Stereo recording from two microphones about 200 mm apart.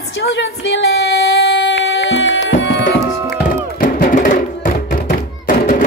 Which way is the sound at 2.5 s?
65° left (ahead or behind).